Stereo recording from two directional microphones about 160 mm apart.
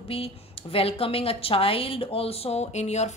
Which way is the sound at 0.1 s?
35° left (ahead or behind).